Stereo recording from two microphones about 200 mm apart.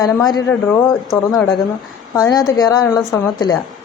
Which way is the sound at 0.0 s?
20° left (ahead or behind).